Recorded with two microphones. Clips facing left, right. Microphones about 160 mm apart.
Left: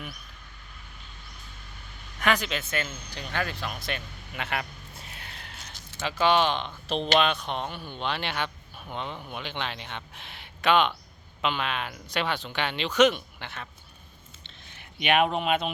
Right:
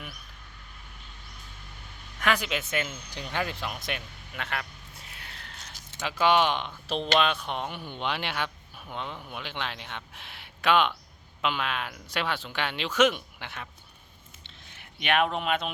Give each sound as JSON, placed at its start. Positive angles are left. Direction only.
{"t": 2.1, "sound": "speech", "side_deg": -5}
{"t": 4.4, "sound": "a man's voice", "side_deg": 10}
{"t": 6.0, "sound": "speech", "side_deg": -10}
{"t": 15.0, "sound": "speech", "side_deg": 5}